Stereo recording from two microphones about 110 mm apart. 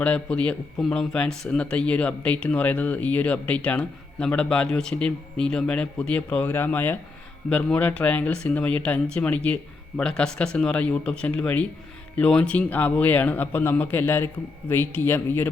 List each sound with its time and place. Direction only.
0.0 s speech: 10° left (ahead or behind)